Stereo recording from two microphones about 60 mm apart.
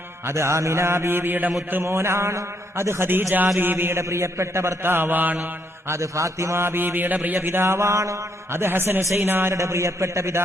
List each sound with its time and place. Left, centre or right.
0.3 s a man's voice: right
1.8 s a man's voice: right
3.6 s mantra: right
5.9 s a man's voice: right
8.5 s mantra: right
9.6 s a man's voice: right